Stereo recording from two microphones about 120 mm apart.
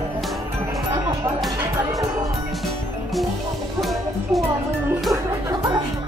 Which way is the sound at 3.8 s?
Centre (ahead or behind).